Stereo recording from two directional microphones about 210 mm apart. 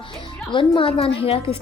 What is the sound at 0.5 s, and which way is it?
Speech, 25° left (ahead or behind).